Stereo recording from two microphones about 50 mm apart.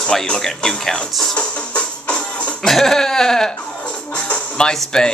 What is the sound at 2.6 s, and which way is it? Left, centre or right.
Speech, centre.